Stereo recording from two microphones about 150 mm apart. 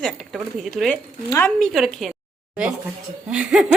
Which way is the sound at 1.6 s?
Centre (ahead or behind).